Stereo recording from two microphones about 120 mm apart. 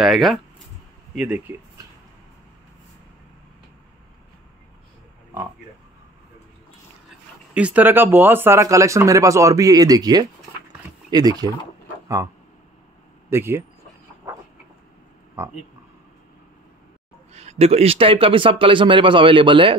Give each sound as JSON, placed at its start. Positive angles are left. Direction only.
{"t": 0.0, "sound": "speech", "side_deg": 0}
{"t": 7.5, "sound": "speech", "side_deg": -10}
{"t": 13.3, "sound": "speech", "side_deg": -20}
{"t": 15.4, "sound": "speech", "side_deg": -20}
{"t": 17.3, "sound": "speech", "side_deg": -65}